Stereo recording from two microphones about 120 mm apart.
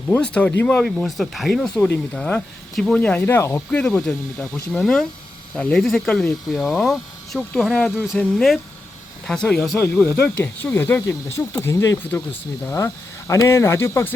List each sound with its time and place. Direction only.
0.2 s speech: 10° left (ahead or behind)
0.9 s speech: centre (ahead or behind); by 3.6 s 20° left (ahead or behind)
3.7 s speech: 10° left (ahead or behind)